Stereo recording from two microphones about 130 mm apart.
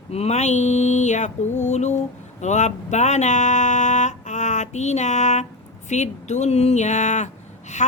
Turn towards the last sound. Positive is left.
turn(degrees=65)  # may be behind; listen again after turning